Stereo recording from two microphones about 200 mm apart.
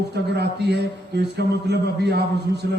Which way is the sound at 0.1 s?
55° right (ahead or behind).